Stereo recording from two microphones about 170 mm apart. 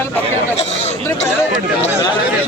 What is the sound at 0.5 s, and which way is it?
Speech, 40° left (ahead or behind).